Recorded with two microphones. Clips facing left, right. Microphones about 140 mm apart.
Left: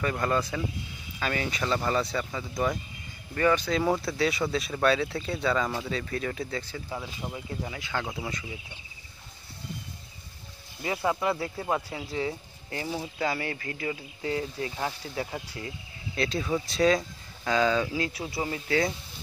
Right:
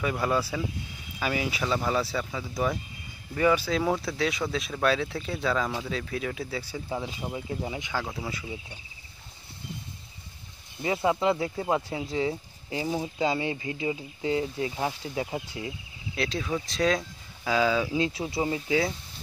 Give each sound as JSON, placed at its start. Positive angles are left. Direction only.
{"t": 0.0, "sound": "speech", "side_deg": -5}
{"t": 6.9, "sound": "speech", "side_deg": -25}
{"t": 7.9, "sound": "speech", "side_deg": 0}
{"t": 10.8, "sound": "speech", "side_deg": -25}
{"t": 16.2, "sound": "speech", "side_deg": 0}
{"t": 17.9, "sound": "speech", "side_deg": -20}
{"t": 18.7, "sound": "speech", "side_deg": -5}